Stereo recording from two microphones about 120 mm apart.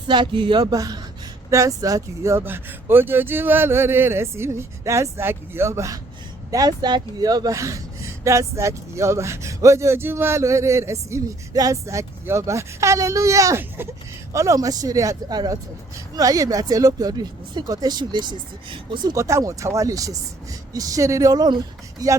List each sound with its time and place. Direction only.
0.1 s speech: 40° right (ahead or behind)
19.1 s speech: 25° right (ahead or behind)